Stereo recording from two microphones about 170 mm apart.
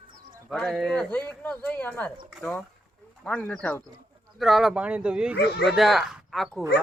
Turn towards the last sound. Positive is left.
turn(degrees=0)  # may be behind; listen again after turning